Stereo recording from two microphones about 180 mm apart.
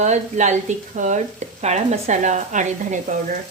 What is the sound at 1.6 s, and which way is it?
Sizzle, 40° right (ahead or behind).